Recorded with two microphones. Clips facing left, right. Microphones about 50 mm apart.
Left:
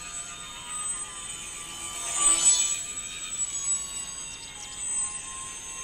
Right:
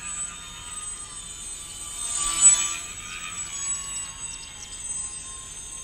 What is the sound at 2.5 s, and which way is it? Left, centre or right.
Music, right.